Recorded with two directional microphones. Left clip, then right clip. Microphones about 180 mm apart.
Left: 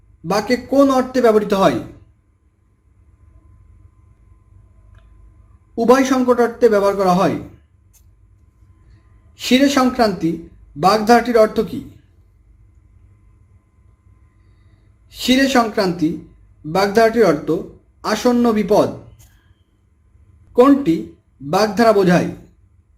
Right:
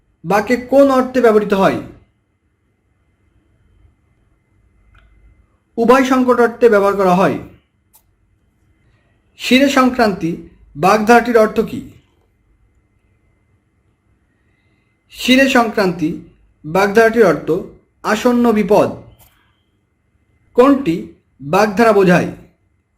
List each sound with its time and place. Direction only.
0.3 s speech: 5° right (ahead or behind)
5.8 s speech: 5° right (ahead or behind)
9.4 s speech: centre (ahead or behind)
15.1 s speech: centre (ahead or behind)
20.6 s speech: centre (ahead or behind)